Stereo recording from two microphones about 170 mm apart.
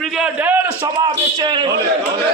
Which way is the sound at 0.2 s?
10° right (ahead or behind).